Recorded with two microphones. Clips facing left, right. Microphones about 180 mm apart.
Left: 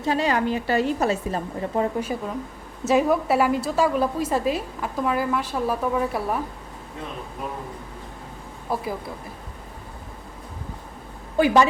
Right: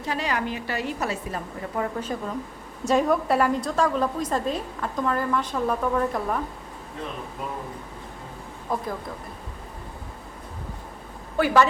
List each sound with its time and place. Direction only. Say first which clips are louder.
0.0 s a woman's voice: left 5 dB; 25° left (ahead or behind)
2.0 s a woman's voice: left 2 dB; 10° left (ahead or behind)
8.7 s a woman's voice: left 1 dB; 5° left (ahead or behind)
11.3 s a woman's voice: left 2 dB; 15° left (ahead or behind)